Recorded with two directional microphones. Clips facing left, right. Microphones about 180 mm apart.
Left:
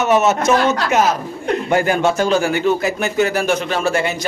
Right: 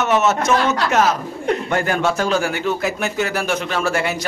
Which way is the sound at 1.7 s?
10° left (ahead or behind).